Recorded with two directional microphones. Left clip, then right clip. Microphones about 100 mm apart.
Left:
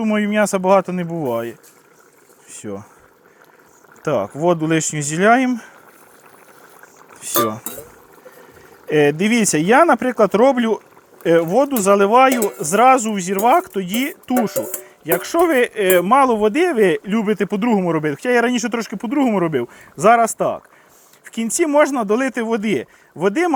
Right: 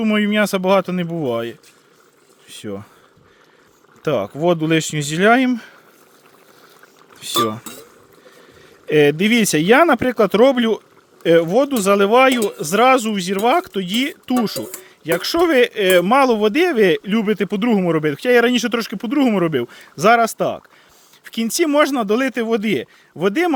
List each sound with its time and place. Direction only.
0.0 s speech: 55° right (ahead or behind)
0.4 s speech: 40° right (ahead or behind)
0.9 s speech: 60° right (ahead or behind)
4.0 s speech: 35° right (ahead or behind)
7.1 s a sound: 35° right (ahead or behind)
7.3 s speech: 55° right (ahead or behind)
8.9 s speech: 35° right (ahead or behind)
18.4 s speech: 50° right (ahead or behind)
19.1 s speech: 65° right (ahead or behind)
20.0 s speech: 40° right (ahead or behind)
21.9 s speech: 65° right (ahead or behind)
22.2 s speech: 35° right (ahead or behind)